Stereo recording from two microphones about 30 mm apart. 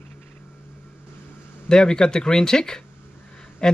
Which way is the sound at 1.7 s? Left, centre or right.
Left.